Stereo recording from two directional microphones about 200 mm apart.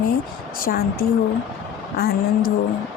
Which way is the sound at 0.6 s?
50° left (ahead or behind).